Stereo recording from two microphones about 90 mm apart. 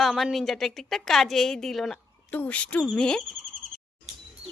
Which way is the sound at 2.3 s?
15° left (ahead or behind).